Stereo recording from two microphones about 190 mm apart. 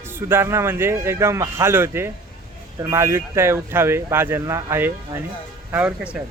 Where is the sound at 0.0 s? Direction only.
10° right (ahead or behind).